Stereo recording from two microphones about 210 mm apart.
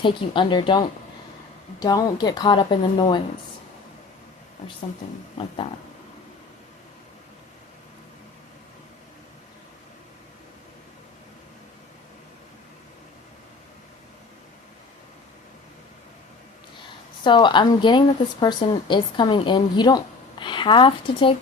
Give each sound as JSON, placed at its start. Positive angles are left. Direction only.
{"t": 0.0, "sound": "a woman's voice", "side_deg": 25}
{"t": 17.2, "sound": "a woman's voice", "side_deg": 20}